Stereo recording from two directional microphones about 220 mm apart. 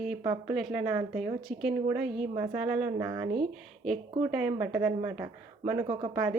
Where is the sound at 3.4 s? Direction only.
Centre (ahead or behind); by 6.3 s 20° right (ahead or behind).